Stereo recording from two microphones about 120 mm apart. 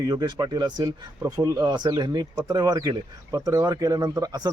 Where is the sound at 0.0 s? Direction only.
35° right (ahead or behind).